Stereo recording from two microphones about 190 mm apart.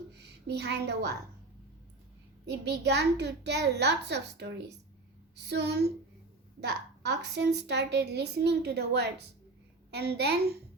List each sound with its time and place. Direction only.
0.1 s a woman's voice: 60° right (ahead or behind)
2.5 s a woman's voice: 65° right (ahead or behind)